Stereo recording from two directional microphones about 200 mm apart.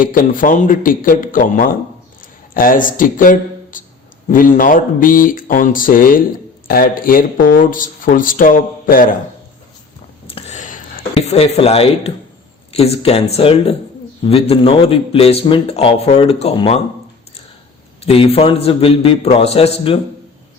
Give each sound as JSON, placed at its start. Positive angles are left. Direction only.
{"t": 0.0, "sound": "speech", "side_deg": 45}
{"t": 10.2, "sound": "a sound", "side_deg": 30}
{"t": 12.7, "sound": "a man's voice", "side_deg": 30}
{"t": 18.0, "sound": "a man's voice", "side_deg": 30}